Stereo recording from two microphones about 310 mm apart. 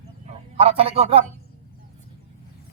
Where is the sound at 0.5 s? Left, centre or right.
Centre.